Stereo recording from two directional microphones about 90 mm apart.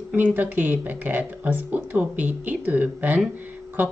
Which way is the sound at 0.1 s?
20° right (ahead or behind).